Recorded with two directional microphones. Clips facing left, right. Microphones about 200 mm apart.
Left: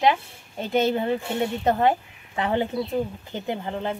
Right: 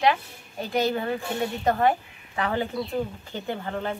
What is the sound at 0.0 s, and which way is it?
A woman's voice, 25° left (ahead or behind).